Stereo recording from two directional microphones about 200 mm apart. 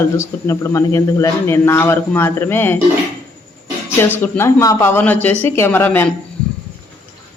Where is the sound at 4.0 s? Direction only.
10° left (ahead or behind).